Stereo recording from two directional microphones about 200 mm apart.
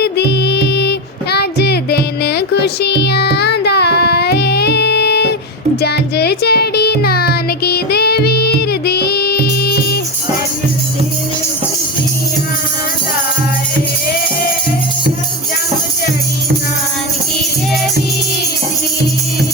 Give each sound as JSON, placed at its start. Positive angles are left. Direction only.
{"t": 0.0, "sound": "music", "side_deg": 55}